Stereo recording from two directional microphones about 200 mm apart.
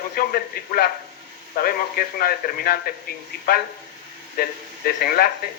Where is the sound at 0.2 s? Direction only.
45° left (ahead or behind).